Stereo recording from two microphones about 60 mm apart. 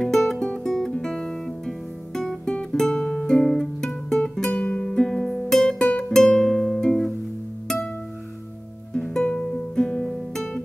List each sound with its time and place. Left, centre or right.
0.0 s music: centre
4.6 s music: left
9.2 s music: centre
10.0 s guitar: centre